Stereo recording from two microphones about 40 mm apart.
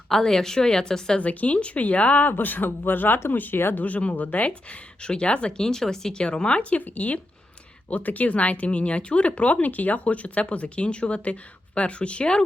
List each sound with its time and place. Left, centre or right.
0.1 s a woman's voice: centre
1.2 s speech: left
2.2 s speech: left
3.6 s speech: left
3.8 s speech: left
5.6 s a woman's voice: centre
6.2 s speech: left